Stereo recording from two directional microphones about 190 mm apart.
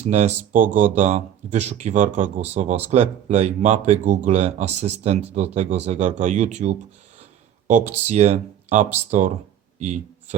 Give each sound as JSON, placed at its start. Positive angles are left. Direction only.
{"t": 0.0, "sound": "speech", "side_deg": -35}
{"t": 7.9, "sound": "speech", "side_deg": -35}
{"t": 9.7, "sound": "a sound", "side_deg": -40}